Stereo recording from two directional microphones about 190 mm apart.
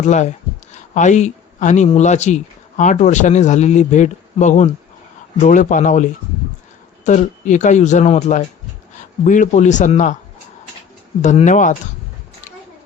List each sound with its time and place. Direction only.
0.0 s speech: 40° left (ahead or behind)
11.2 s speech: 40° left (ahead or behind)